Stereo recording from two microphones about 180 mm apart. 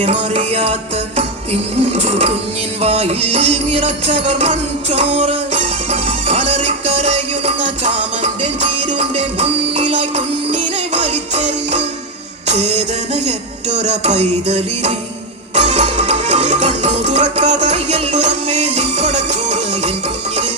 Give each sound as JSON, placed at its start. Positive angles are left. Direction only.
{"t": 0.0, "sound": "music", "side_deg": -40}
{"t": 8.9, "sound": "music", "side_deg": -35}